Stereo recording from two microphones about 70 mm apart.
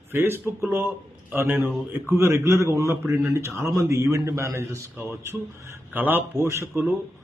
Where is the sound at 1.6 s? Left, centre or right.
Right.